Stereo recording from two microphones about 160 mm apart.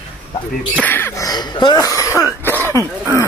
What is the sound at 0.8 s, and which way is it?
Cough, 10° left (ahead or behind).